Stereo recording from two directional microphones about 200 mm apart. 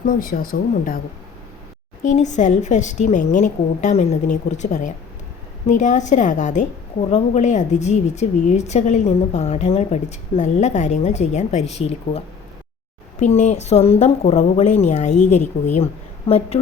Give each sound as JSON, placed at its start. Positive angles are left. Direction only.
{"t": 0.0, "sound": "speech", "side_deg": 45}
{"t": 2.0, "sound": "speech", "side_deg": 35}